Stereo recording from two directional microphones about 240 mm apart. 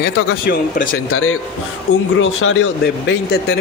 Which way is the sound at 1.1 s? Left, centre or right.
Left.